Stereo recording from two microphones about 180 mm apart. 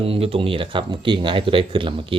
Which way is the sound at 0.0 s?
30° right (ahead or behind).